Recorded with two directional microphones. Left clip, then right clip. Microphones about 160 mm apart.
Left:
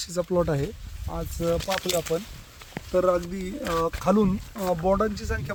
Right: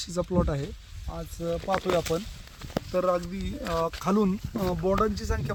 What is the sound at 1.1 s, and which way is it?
Speech, 40° left (ahead or behind).